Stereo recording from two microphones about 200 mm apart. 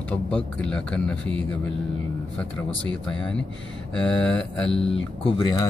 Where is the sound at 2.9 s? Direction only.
5° left (ahead or behind).